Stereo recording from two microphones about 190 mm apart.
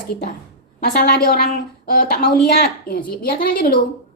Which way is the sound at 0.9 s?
50° left (ahead or behind).